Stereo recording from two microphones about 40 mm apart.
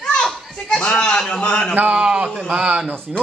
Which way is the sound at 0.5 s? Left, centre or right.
Centre.